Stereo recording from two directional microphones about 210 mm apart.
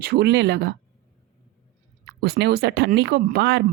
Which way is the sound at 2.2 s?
50° right (ahead or behind).